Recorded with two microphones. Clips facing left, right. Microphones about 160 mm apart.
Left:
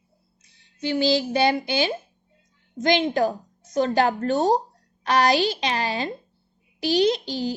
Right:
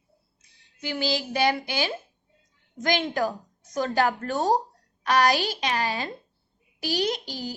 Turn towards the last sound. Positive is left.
turn(degrees=25)  # may be behind; listen again after turning